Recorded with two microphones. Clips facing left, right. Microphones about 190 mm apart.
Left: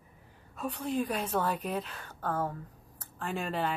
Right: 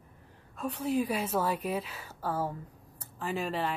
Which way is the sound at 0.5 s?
Centre (ahead or behind).